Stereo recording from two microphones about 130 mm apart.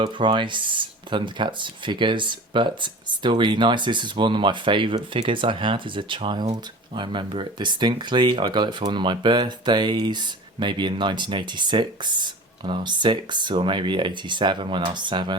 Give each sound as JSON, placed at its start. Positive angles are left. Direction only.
{"t": 0.0, "sound": "speech", "side_deg": -40}